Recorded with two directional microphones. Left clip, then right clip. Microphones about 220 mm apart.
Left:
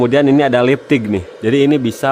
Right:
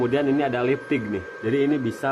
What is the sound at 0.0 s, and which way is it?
A man's voice, 55° left (ahead or behind).